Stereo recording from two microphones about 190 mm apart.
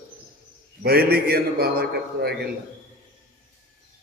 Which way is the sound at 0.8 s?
55° right (ahead or behind).